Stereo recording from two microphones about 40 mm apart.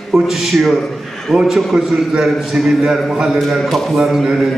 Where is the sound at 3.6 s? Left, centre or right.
Centre.